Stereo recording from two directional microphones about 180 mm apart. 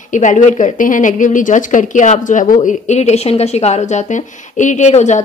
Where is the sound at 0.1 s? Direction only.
45° left (ahead or behind).